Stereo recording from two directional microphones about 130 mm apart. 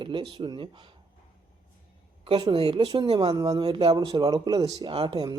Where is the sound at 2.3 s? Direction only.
45° right (ahead or behind).